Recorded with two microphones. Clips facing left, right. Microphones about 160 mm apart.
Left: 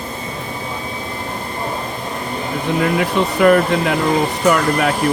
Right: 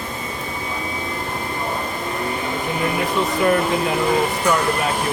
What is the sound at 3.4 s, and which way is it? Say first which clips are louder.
Speech: left 6 dB; 65° left (ahead or behind).